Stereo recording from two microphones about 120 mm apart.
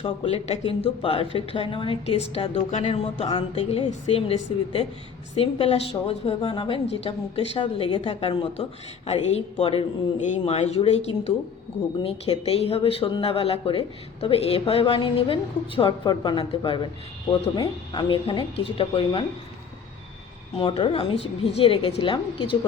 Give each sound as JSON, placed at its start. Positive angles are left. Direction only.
{"t": 0.0, "sound": "a woman's voice", "side_deg": 55}
{"t": 9.0, "sound": "a woman's voice", "side_deg": 60}
{"t": 10.2, "sound": "a woman's voice", "side_deg": 70}
{"t": 20.6, "sound": "speech", "side_deg": 45}